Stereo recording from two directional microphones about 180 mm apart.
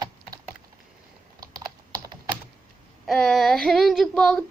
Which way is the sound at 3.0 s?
Centre (ahead or behind).